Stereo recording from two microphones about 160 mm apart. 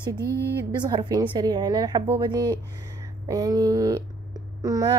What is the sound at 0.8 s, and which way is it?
Speech, 25° right (ahead or behind).